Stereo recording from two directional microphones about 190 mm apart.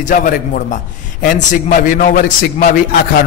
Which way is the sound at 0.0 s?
45° left (ahead or behind).